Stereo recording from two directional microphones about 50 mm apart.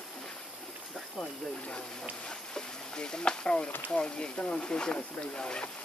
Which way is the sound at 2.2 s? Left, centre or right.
Centre.